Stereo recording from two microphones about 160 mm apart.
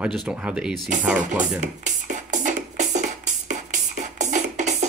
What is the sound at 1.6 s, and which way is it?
Music, 50° right (ahead or behind).